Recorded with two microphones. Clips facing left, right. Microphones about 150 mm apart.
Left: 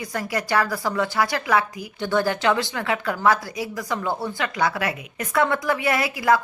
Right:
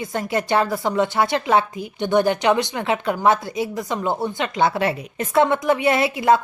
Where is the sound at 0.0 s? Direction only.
25° right (ahead or behind).